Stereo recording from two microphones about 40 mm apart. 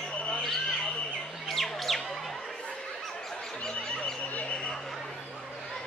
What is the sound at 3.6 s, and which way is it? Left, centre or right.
Music, left.